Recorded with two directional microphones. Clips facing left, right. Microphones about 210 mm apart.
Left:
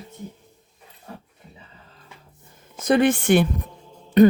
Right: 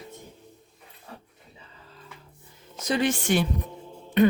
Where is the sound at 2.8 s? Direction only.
55° left (ahead or behind).